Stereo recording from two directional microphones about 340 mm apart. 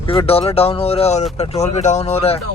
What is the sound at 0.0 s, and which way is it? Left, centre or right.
Speech, centre.